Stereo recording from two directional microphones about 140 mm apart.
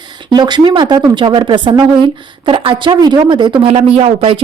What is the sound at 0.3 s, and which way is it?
Speech, 30° right (ahead or behind).